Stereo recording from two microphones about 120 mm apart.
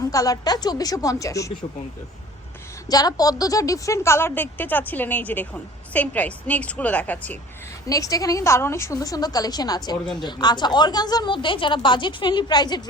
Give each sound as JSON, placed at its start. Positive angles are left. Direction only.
{"t": 0.1, "sound": "a woman's voice", "side_deg": 30}
{"t": 2.9, "sound": "a woman's voice", "side_deg": 30}
{"t": 7.9, "sound": "a woman's voice", "side_deg": 30}